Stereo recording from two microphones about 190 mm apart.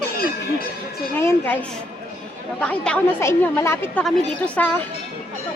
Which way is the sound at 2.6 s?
5° left (ahead or behind).